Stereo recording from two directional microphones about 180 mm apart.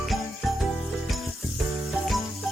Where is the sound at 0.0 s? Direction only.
Centre (ahead or behind).